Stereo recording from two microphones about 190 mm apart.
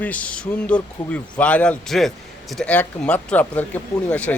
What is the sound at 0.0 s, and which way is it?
Speech, 5° left (ahead or behind).